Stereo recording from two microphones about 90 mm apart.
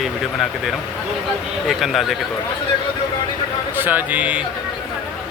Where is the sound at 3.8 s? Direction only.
20° right (ahead or behind).